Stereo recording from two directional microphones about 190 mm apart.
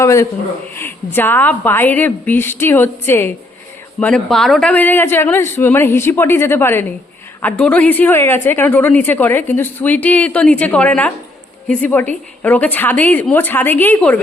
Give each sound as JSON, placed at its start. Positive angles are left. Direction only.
{"t": 0.0, "sound": "a woman's voice", "side_deg": 15}